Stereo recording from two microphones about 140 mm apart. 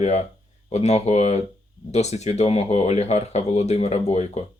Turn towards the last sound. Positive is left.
turn(degrees=50)  # may be behind; listen again after turning